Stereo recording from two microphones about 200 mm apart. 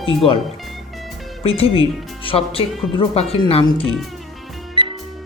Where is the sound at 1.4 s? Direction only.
30° left (ahead or behind).